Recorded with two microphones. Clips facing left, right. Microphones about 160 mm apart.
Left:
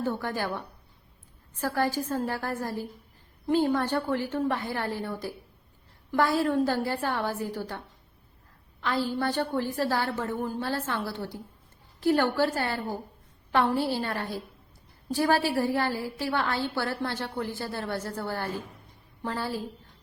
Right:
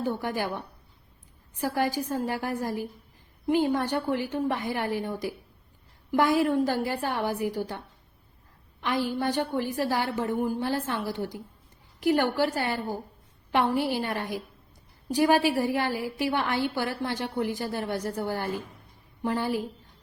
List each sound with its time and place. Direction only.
0.0 s a woman's voice: 15° right (ahead or behind)
8.8 s a woman's voice: 15° right (ahead or behind)